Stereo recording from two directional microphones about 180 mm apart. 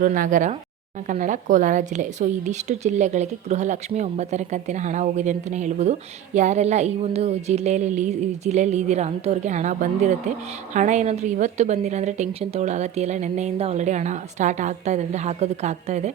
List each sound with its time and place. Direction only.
0.0 s a woman's voice: 45° right (ahead or behind)